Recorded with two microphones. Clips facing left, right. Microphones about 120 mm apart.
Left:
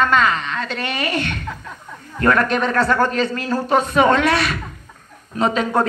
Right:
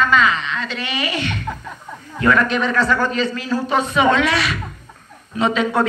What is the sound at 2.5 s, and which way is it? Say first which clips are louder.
A man's voice: left 1 dB; 50° left (ahead or behind).